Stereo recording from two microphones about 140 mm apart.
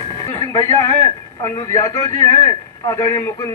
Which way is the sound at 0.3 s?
20° left (ahead or behind).